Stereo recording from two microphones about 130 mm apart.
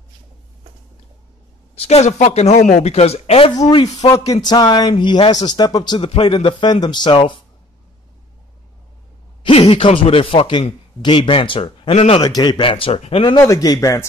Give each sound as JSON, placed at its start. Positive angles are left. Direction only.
{"t": 1.8, "sound": "speech", "side_deg": 55}
{"t": 3.8, "sound": "a man's voice", "side_deg": 25}
{"t": 5.9, "sound": "speech", "side_deg": 45}
{"t": 9.4, "sound": "speech", "side_deg": 45}
{"t": 12.2, "sound": "speech", "side_deg": 30}
{"t": 13.4, "sound": "a man's voice", "side_deg": 25}